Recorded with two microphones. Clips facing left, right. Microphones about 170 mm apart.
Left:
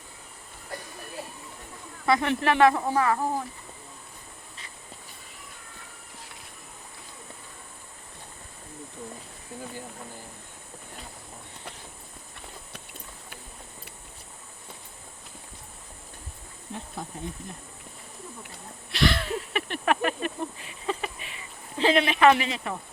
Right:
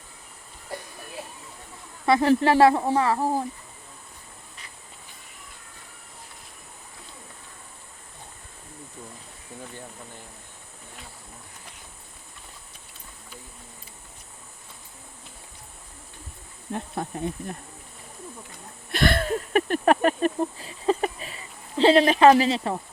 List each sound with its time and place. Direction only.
2.0 s speech: 30° right (ahead or behind)
16.7 s speech: 60° right (ahead or behind)
18.9 s a sound: 50° right (ahead or behind); by 22.8 s 30° right (ahead or behind)